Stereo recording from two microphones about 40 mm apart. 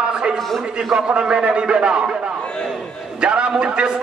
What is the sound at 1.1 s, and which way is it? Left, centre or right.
A man's voice, right.